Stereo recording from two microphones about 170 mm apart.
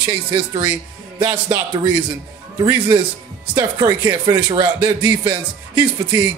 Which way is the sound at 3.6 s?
25° right (ahead or behind).